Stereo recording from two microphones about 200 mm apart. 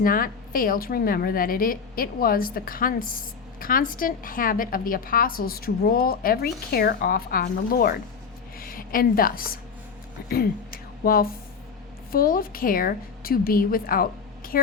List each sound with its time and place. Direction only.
0.0 s a woman's voice: 45° left (ahead or behind)